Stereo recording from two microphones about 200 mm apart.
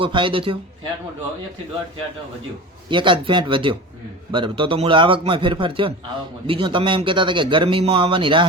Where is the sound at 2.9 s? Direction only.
25° right (ahead or behind).